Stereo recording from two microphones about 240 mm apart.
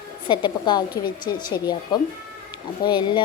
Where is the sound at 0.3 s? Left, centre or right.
Centre.